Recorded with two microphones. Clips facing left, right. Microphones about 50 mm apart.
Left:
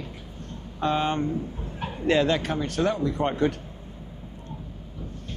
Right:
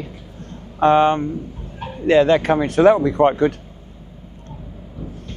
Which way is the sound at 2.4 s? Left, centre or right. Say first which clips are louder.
Right 10 dB; right.